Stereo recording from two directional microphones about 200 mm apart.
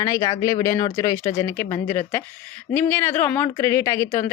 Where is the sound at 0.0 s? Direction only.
15° left (ahead or behind).